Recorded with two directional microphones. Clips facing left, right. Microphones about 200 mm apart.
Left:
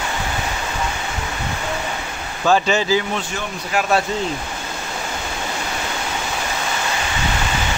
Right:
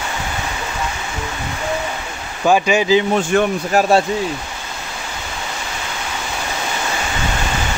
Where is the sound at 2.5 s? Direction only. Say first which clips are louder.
Right 3 dB; 15° right (ahead or behind).